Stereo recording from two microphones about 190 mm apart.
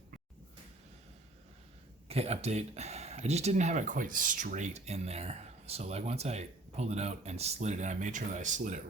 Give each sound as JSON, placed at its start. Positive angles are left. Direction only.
{"t": 2.0, "sound": "speech", "side_deg": -35}